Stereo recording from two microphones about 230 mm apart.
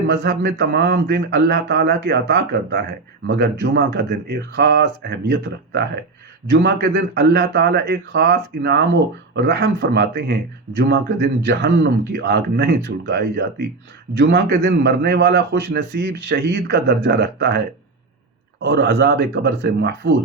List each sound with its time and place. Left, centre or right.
0.1 s a man's voice: right
18.6 s a man's voice: right